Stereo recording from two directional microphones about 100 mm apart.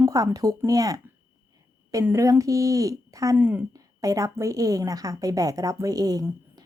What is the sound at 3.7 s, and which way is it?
A woman's voice, 35° right (ahead or behind).